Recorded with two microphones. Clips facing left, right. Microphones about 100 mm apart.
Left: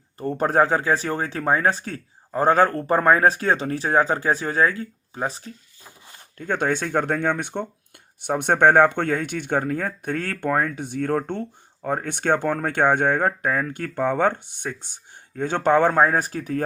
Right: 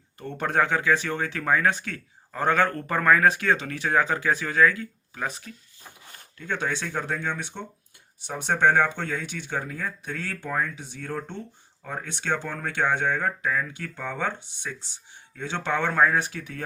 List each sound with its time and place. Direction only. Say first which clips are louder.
0.2 s speech: left 6 dB; 35° left (ahead or behind)
6.3 s speech: left 6 dB; 45° left (ahead or behind)